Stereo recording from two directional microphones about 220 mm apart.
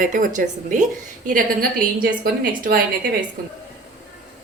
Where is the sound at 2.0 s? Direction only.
45° right (ahead or behind).